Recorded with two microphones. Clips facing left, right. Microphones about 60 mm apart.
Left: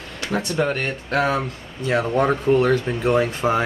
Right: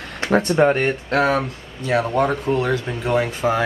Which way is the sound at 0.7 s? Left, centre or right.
Right.